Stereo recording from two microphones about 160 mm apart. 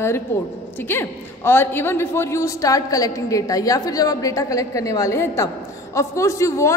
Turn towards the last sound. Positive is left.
turn(degrees=20)  # may be behind; listen again after turning